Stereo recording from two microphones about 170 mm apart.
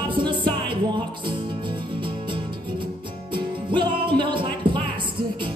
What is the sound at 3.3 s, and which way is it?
Music, 30° right (ahead or behind).